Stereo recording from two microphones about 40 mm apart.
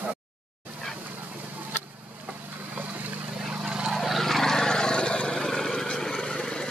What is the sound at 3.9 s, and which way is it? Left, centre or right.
Vehicle, centre.